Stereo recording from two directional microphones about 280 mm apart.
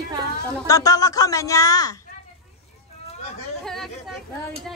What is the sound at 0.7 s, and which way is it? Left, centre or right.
A woman's voice, centre.